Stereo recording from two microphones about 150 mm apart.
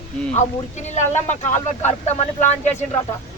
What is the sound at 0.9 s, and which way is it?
A man's voice, 50° left (ahead or behind).